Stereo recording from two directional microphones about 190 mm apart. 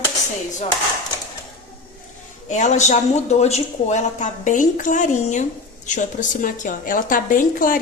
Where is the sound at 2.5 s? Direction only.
40° left (ahead or behind).